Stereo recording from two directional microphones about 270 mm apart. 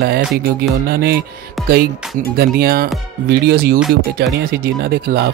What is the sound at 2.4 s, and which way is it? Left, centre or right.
Speech, right.